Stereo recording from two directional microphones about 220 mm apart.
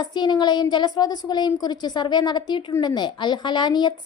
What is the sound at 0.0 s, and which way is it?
A woman's voice, 20° left (ahead or behind).